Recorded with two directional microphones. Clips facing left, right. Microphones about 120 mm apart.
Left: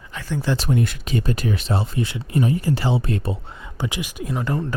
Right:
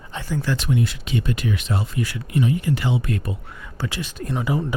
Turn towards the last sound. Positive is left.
turn(degrees=0)  # may be behind; listen again after turning